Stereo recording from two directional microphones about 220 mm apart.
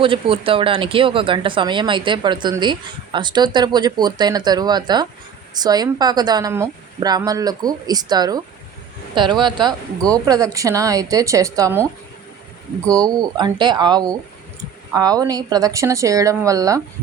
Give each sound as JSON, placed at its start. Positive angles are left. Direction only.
{"t": 0.0, "sound": "a woman's voice", "side_deg": -25}
{"t": 12.9, "sound": "a woman's voice", "side_deg": -15}